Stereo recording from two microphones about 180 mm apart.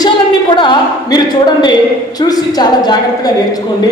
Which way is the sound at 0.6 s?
25° left (ahead or behind).